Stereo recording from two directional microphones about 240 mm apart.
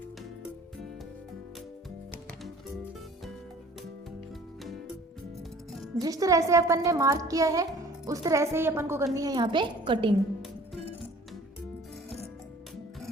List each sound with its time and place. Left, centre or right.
6.0 s a child's voice: centre